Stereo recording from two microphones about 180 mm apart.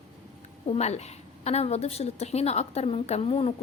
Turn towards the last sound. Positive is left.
turn(degrees=30)  # may be behind; listen again after turning